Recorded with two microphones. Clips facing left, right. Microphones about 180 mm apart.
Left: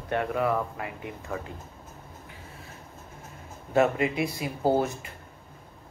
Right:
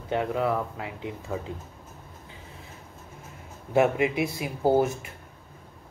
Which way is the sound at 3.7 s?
10° right (ahead or behind).